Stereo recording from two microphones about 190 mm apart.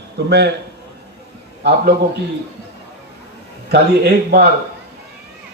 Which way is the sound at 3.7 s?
60° right (ahead or behind).